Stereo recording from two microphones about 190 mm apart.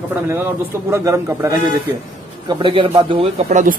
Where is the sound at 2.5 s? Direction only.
25° right (ahead or behind).